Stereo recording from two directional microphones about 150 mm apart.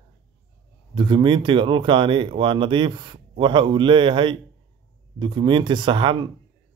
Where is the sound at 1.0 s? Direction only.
30° right (ahead or behind).